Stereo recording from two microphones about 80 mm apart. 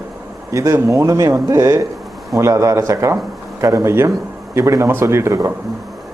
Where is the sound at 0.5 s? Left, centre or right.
Right.